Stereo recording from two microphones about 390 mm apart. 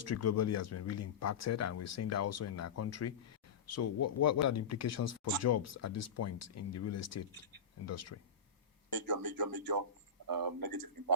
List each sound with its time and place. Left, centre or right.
0.0 s speech: left
8.9 s a man's voice: right